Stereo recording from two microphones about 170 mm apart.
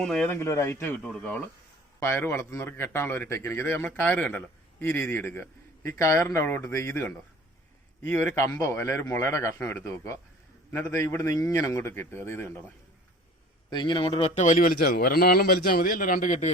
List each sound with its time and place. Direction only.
0.0 s a man's voice: 5° left (ahead or behind)
13.7 s a man's voice: 25° left (ahead or behind)
14.3 s a man's voice: 50° left (ahead or behind)
14.8 s a man's voice: 60° left (ahead or behind)